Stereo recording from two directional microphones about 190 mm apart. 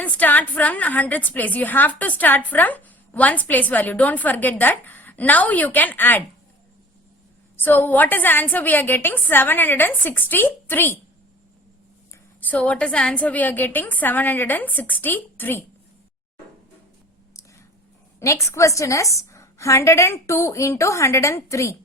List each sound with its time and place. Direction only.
0.0 s a woman's voice: 10° left (ahead or behind)
7.5 s a woman's voice: 10° left (ahead or behind)
12.4 s a woman's voice: 10° left (ahead or behind)
18.2 s a woman's voice: 15° left (ahead or behind)